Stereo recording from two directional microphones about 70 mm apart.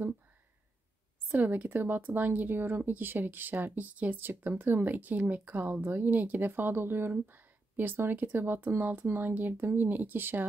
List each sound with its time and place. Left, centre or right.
1.3 s speech: right